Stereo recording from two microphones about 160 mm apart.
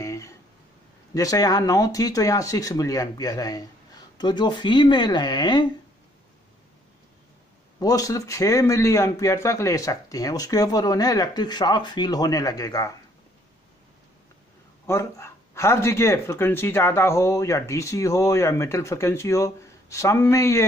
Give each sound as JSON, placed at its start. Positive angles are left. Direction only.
{"t": 0.0, "sound": "a sound", "side_deg": 20}
{"t": 1.1, "sound": "speech", "side_deg": 20}
{"t": 7.8, "sound": "speech", "side_deg": 20}
{"t": 14.9, "sound": "speech", "side_deg": 15}